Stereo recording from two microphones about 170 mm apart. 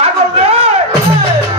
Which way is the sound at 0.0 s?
35° right (ahead or behind).